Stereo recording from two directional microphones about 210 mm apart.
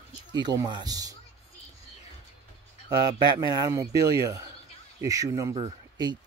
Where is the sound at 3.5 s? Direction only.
15° right (ahead or behind).